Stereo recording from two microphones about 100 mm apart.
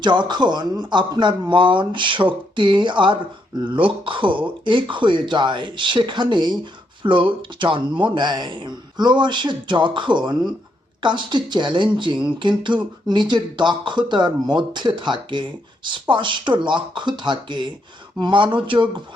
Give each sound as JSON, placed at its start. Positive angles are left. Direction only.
{"t": 0.0, "sound": "speech", "side_deg": -50}